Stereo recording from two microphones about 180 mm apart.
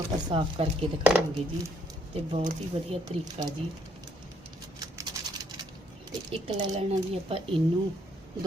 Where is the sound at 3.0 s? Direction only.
20° right (ahead or behind).